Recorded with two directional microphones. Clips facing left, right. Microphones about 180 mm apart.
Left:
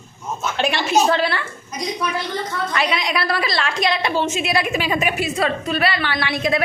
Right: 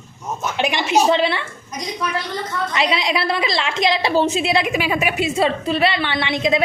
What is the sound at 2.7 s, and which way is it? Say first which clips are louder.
A woman's voice: right 2 dB; 25° right (ahead or behind).